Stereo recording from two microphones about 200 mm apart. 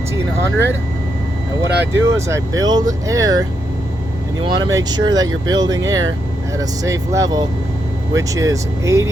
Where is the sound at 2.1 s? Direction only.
15° right (ahead or behind).